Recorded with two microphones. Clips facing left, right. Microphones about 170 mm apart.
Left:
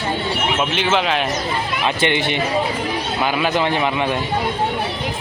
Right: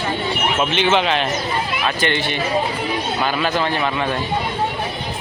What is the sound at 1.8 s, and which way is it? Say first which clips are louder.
A man's voice: left 4 dB; 20° left (ahead or behind).